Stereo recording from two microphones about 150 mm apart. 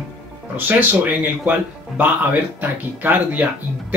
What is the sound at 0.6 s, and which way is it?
Speech, 10° right (ahead or behind).